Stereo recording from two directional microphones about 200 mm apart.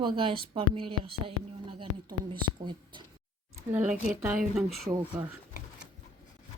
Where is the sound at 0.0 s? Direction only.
25° right (ahead or behind).